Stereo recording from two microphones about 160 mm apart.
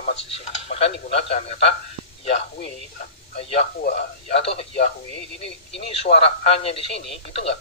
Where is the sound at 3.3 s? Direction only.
40° left (ahead or behind).